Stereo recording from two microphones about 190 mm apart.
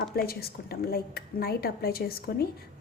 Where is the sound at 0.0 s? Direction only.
55° left (ahead or behind).